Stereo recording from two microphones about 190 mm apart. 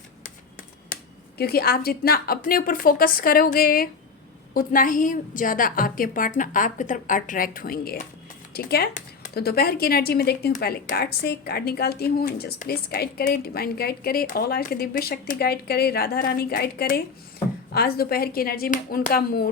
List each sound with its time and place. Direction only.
1.4 s a woman's voice: 55° left (ahead or behind)